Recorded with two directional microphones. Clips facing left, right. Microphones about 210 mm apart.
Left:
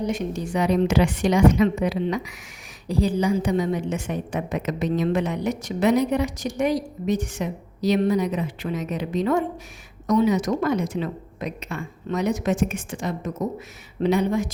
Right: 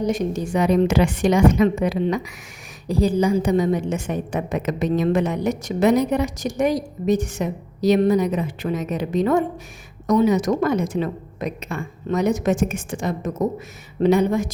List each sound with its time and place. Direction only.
0.0 s a woman's voice: 40° right (ahead or behind)